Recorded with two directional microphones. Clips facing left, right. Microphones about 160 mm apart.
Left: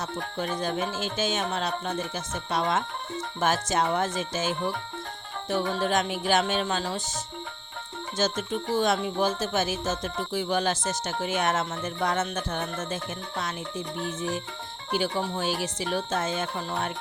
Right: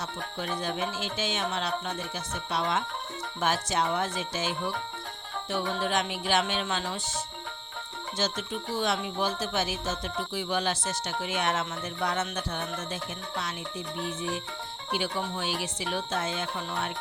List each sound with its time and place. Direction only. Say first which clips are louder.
0.3 s speech: left 3 dB; 45° left (ahead or behind)
8.2 s speech: left 5 dB; 45° left (ahead or behind)